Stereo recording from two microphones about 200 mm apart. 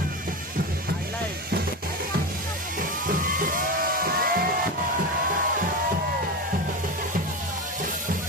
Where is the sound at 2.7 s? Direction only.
45° right (ahead or behind).